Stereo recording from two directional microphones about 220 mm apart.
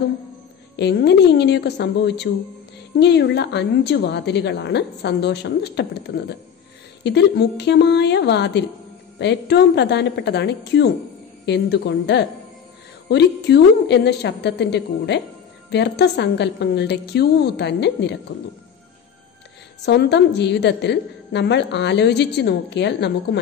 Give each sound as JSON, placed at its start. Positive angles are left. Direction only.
{"t": 0.7, "sound": "a woman's voice", "side_deg": 50}
{"t": 19.8, "sound": "a woman's voice", "side_deg": 50}